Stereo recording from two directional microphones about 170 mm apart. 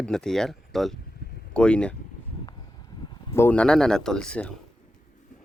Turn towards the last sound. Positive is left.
turn(degrees=5)  # may be behind; listen again after turning